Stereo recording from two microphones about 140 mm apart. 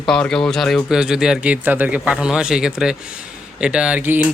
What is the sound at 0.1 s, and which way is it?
A man's voice, 5° left (ahead or behind).